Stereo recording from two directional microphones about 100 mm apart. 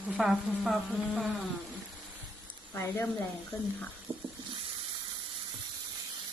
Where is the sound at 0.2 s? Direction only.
5° right (ahead or behind).